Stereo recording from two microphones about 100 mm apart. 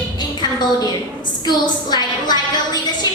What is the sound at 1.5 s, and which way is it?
Speech, 45° left (ahead or behind).